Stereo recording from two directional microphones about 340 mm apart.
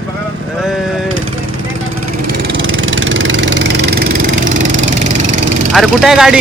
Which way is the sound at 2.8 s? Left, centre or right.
Right.